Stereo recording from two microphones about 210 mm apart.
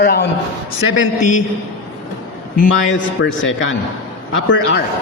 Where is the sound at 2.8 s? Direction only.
60° left (ahead or behind).